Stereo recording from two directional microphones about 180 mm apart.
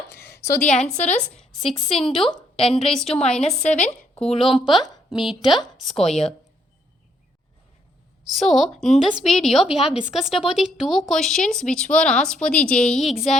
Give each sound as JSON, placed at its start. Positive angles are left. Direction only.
{"t": 0.1, "sound": "a sound", "side_deg": 60}
{"t": 1.0, "sound": "speech", "side_deg": 5}
{"t": 3.4, "sound": "a woman's voice", "side_deg": 40}
{"t": 5.2, "sound": "speech", "side_deg": 0}
{"t": 8.3, "sound": "speech", "side_deg": 0}